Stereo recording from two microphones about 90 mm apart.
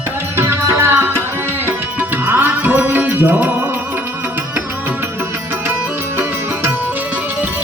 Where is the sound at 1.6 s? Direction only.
20° right (ahead or behind).